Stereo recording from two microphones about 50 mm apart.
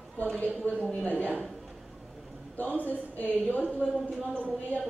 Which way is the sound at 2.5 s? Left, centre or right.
Left.